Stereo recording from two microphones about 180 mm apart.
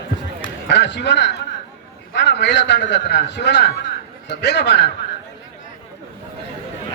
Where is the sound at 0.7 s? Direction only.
75° left (ahead or behind).